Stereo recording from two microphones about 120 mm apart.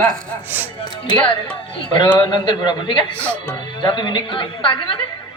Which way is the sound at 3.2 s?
10° left (ahead or behind).